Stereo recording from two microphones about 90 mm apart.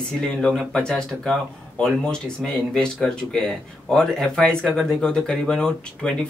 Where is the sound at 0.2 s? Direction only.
10° left (ahead or behind).